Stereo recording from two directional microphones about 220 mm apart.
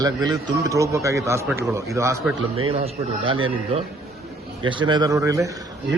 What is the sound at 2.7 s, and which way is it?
Speech, 25° right (ahead or behind).